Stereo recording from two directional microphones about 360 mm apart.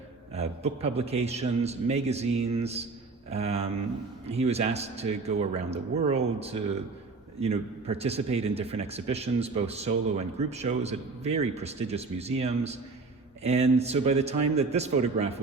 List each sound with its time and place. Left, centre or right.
0.3 s a man's voice: centre